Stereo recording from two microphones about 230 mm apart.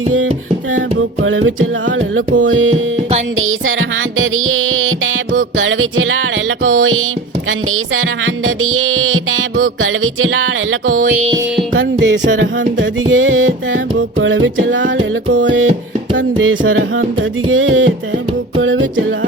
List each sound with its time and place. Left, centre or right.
1.2 s music: right
8.4 s music: right
11.0 s music: right
11.7 s music: right
16.1 s music: right